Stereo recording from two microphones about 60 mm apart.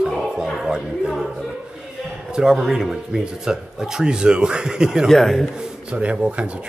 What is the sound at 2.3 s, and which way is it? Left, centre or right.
Speech, centre.